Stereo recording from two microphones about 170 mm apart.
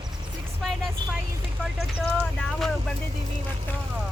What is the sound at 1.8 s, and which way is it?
Speech, centre (ahead or behind).